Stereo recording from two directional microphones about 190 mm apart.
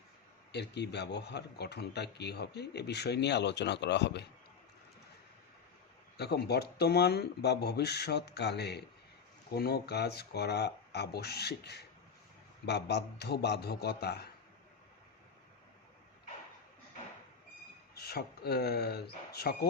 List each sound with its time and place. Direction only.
0.5 s speech: 65° left (ahead or behind)
6.1 s speech: 60° left (ahead or behind)
17.9 s speech: 55° left (ahead or behind)